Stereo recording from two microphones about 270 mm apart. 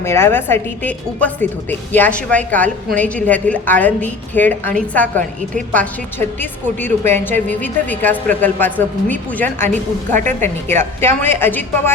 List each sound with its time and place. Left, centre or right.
0.0 s a woman's voice: centre
9.6 s a woman's voice: right
11.0 s a woman's voice: centre